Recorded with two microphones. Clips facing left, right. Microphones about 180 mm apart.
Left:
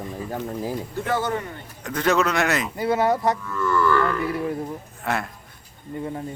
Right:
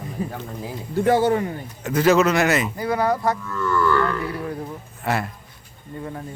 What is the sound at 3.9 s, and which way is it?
A man's voice, centre (ahead or behind).